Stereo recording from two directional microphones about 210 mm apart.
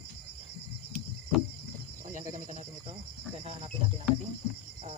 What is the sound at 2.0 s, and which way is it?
Snake, 35° right (ahead or behind).